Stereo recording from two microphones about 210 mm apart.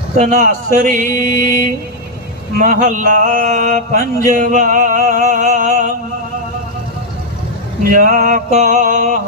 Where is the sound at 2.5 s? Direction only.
40° right (ahead or behind).